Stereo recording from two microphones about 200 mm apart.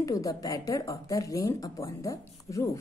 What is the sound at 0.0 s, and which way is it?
A woman's voice, 15° left (ahead or behind).